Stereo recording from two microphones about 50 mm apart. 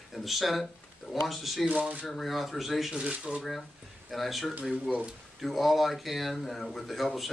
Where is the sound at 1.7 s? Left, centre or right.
Right.